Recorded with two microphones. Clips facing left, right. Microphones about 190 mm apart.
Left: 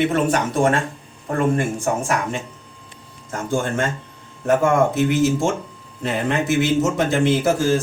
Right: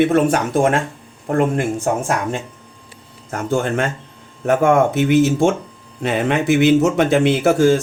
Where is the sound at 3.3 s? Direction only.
65° right (ahead or behind).